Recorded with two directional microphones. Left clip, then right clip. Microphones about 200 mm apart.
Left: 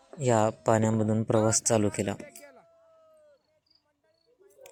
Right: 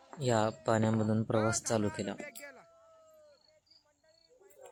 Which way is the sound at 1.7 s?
10° left (ahead or behind).